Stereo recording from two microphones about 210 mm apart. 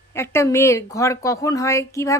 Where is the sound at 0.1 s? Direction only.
10° left (ahead or behind).